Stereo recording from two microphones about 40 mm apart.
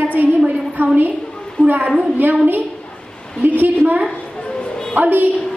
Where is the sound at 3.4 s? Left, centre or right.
Right.